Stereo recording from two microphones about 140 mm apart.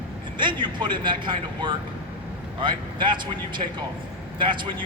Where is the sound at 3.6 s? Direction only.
50° right (ahead or behind).